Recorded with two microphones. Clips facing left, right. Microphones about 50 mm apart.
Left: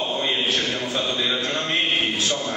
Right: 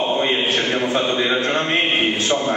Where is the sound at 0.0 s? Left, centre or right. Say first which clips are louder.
Right 5 dB; right.